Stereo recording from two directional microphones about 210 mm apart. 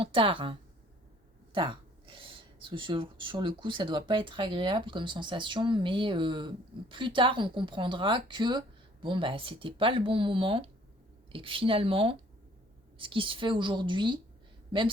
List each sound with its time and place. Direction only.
0.0 s speech: 25° right (ahead or behind)
1.5 s speech: 25° right (ahead or behind)